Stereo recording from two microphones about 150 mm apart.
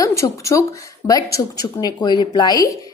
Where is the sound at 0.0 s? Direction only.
20° left (ahead or behind).